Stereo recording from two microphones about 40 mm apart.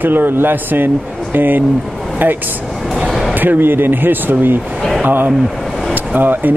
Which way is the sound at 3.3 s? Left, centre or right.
Right.